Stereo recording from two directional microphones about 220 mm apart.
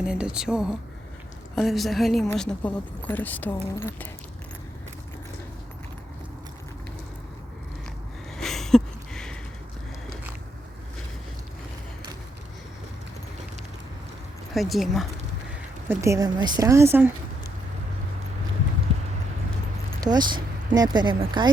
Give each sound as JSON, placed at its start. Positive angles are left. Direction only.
{"t": 0.0, "sound": "speech", "side_deg": -5}
{"t": 8.4, "sound": "a sound", "side_deg": 0}
{"t": 14.5, "sound": "speech", "side_deg": 0}
{"t": 15.9, "sound": "a woman's voice", "side_deg": -15}
{"t": 18.9, "sound": "clip-clop", "side_deg": -25}
{"t": 20.0, "sound": "speech", "side_deg": -20}